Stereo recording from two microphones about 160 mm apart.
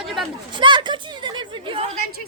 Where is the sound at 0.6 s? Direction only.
30° right (ahead or behind).